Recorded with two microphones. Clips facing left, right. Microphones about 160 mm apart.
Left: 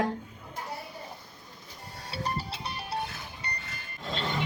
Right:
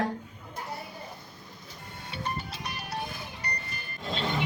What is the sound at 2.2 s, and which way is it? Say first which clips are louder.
Music: left 1 dB; 30° left (ahead or behind).